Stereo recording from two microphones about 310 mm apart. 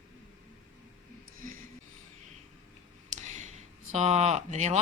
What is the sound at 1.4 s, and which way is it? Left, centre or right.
Music, right.